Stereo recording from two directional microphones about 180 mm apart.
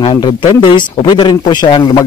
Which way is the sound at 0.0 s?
25° left (ahead or behind).